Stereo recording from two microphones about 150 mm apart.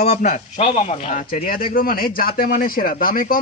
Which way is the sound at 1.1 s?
70° left (ahead or behind).